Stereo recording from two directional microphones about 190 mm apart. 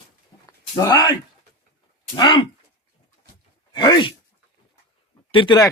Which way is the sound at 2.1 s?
25° left (ahead or behind).